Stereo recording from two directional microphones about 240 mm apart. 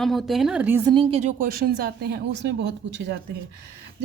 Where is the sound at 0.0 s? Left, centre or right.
Centre.